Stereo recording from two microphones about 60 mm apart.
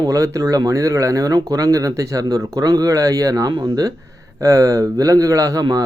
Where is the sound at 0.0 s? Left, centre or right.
Right.